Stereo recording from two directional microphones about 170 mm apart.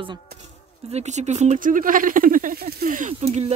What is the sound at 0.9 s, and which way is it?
Speech, 40° right (ahead or behind).